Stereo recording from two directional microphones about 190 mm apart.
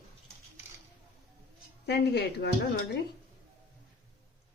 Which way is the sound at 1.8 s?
60° left (ahead or behind).